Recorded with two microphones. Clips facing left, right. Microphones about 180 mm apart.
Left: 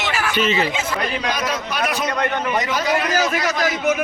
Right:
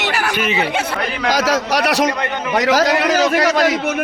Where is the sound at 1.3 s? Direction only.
90° right.